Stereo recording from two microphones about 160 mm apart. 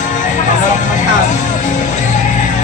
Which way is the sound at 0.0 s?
50° left (ahead or behind).